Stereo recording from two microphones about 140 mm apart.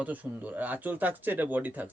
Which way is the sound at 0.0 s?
10° right (ahead or behind).